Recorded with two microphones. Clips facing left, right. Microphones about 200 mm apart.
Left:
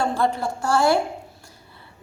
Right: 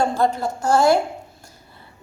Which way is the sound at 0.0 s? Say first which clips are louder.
Right 2 dB; 40° right (ahead or behind).